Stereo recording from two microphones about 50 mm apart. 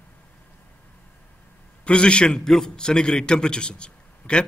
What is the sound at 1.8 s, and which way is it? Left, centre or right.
A man's voice, left.